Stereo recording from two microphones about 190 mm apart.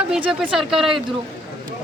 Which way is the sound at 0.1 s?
5° right (ahead or behind).